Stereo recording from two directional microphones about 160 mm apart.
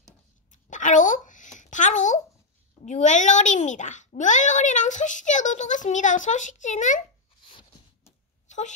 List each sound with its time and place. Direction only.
0.5 s a sound: 50° left (ahead or behind)
2.8 s a child's voice: 50° left (ahead or behind)
8.5 s wail: 45° left (ahead or behind)